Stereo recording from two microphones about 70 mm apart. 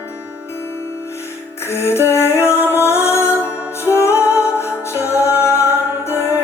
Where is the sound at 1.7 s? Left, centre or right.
Left.